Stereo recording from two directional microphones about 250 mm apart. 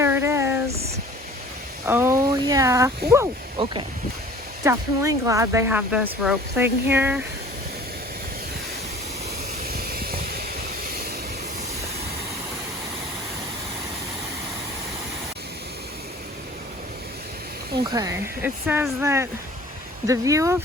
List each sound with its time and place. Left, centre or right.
0.0 s a sound: centre
1.9 s speech: centre
9.6 s vehicle: right
17.8 s speech: centre